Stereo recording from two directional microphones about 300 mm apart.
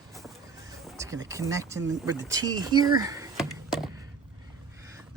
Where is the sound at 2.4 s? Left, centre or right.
Centre.